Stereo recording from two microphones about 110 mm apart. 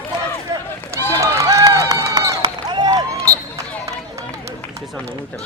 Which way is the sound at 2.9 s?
30° right (ahead or behind).